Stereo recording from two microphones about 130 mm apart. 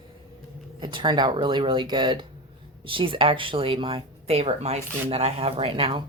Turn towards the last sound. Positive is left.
turn(degrees=-45)  # may be behind; listen again after turning